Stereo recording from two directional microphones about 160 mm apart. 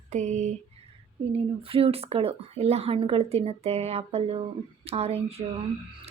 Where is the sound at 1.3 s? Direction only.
35° right (ahead or behind).